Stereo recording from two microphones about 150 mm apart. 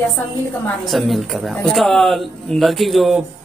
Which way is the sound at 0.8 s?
Centre (ahead or behind).